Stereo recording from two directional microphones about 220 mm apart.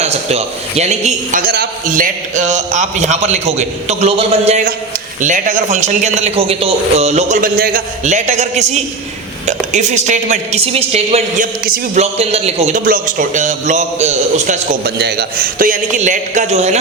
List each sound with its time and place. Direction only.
0.0 s a man's voice: 30° right (ahead or behind)
11.6 s a man's voice: 40° right (ahead or behind)
12.1 s a man's voice: 30° right (ahead or behind)